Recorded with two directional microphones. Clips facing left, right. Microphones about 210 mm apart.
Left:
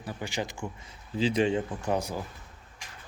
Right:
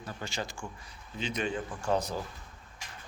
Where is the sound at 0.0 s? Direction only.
15° left (ahead or behind).